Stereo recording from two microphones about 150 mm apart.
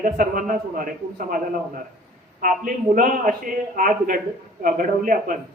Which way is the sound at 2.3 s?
65° right (ahead or behind).